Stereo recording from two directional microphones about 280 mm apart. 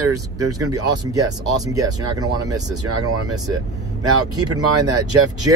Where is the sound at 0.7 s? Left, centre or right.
Centre.